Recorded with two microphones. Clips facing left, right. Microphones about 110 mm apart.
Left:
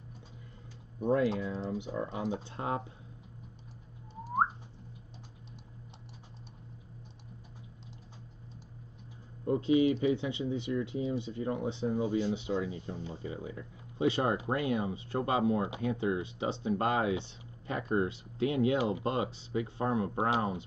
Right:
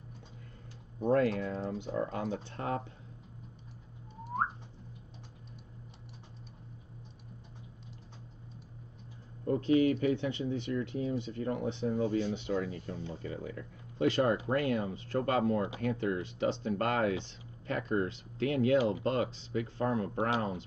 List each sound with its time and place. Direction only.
1.0 s speech: 5° left (ahead or behind)
2.5 s speech: 25° left (ahead or behind)
9.5 s speech: 15° left (ahead or behind)
9.8 s speech: 25° left (ahead or behind)
10.4 s speech: 10° left (ahead or behind)